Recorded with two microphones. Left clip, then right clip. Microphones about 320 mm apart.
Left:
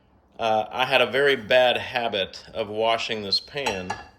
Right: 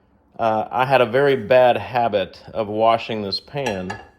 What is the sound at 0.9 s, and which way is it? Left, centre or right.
Speech, centre.